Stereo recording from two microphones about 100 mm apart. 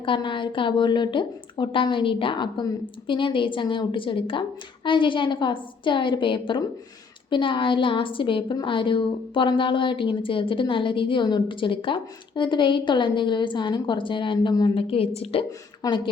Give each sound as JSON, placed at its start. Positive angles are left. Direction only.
{"t": 0.0, "sound": "a woman's voice", "side_deg": 55}
{"t": 14.8, "sound": "a woman's voice", "side_deg": 70}
{"t": 15.8, "sound": "a woman's voice", "side_deg": 40}